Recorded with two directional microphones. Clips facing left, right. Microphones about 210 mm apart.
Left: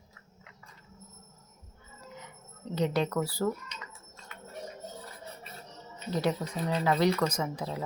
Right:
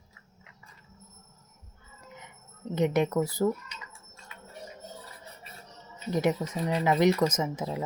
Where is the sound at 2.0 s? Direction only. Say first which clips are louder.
Left 2 dB; 20° right (ahead or behind).